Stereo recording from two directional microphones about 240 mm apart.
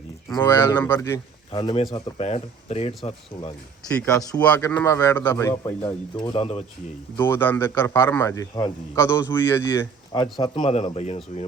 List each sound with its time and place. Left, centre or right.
0.3 s a man's voice: centre
1.5 s speech: left
3.9 s a man's voice: centre; by 6.7 s left
7.2 s a man's voice: centre; by 11.4 s left